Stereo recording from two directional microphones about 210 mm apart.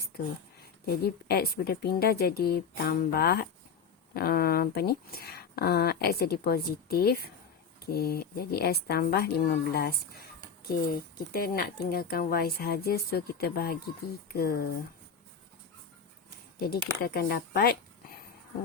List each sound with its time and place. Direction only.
0.9 s speech: 50° left (ahead or behind)
16.6 s speech: 50° left (ahead or behind)